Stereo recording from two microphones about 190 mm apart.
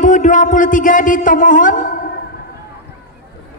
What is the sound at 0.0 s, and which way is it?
A man's voice, 40° left (ahead or behind).